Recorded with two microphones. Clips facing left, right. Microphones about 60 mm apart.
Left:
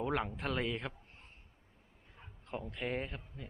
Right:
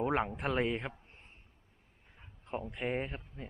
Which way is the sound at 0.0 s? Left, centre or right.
Right.